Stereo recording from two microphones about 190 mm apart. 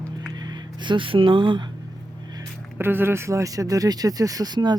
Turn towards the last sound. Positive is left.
turn(degrees=-20)  # may be behind; listen again after turning